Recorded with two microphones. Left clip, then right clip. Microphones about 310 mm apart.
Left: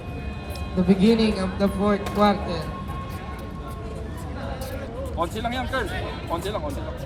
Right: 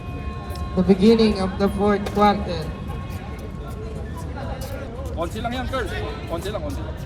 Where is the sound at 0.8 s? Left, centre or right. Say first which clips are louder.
Right 4 dB; centre.